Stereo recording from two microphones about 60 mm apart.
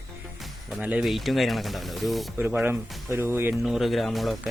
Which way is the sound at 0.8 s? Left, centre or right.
Right.